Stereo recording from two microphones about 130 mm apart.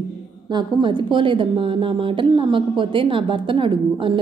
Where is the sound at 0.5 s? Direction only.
35° right (ahead or behind).